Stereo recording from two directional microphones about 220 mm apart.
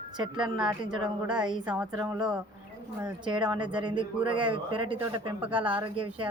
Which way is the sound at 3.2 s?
20° right (ahead or behind).